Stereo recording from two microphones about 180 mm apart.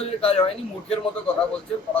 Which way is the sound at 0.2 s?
30° left (ahead or behind).